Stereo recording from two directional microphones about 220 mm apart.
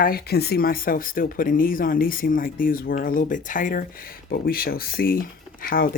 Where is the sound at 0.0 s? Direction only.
45° left (ahead or behind).